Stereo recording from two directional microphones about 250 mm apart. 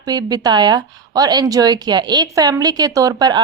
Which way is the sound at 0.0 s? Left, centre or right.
Centre.